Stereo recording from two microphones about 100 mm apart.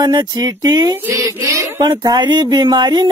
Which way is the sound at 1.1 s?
35° right (ahead or behind).